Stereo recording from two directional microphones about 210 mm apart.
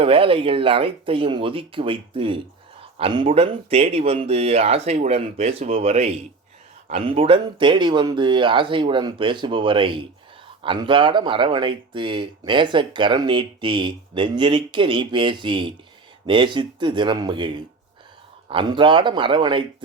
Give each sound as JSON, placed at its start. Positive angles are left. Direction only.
{"t": 0.0, "sound": "speech", "side_deg": -25}